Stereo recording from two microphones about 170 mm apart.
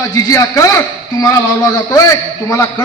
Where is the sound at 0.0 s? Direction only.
20° left (ahead or behind).